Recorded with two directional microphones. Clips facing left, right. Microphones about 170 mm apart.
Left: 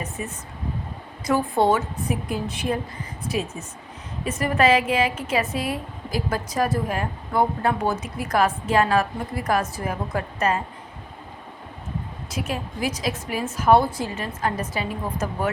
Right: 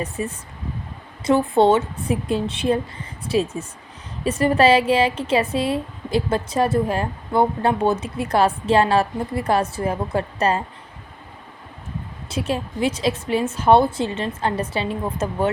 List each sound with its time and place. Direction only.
0.0 s a woman's voice: 30° right (ahead or behind)
12.3 s a woman's voice: 30° right (ahead or behind)